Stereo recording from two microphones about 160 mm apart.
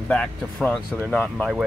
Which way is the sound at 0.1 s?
5° left (ahead or behind).